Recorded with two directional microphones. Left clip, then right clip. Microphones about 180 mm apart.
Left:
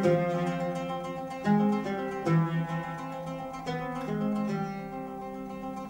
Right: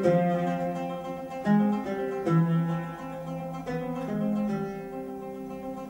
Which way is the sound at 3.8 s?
20° left (ahead or behind).